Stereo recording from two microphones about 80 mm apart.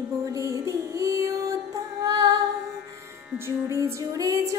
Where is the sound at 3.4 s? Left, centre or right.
Right.